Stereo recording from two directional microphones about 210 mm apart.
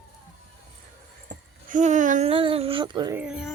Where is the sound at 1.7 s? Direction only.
35° right (ahead or behind); by 3.1 s 20° right (ahead or behind).